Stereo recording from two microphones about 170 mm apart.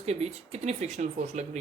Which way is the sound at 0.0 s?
40° right (ahead or behind).